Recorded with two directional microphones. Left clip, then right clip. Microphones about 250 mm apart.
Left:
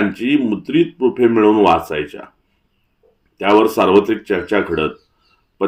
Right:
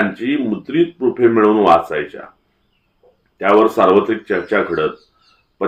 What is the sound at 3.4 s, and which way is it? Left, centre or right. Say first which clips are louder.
Speech: right 1 dB; left.